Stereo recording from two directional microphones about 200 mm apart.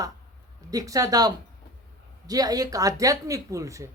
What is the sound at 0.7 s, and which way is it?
A man's voice, 15° right (ahead or behind).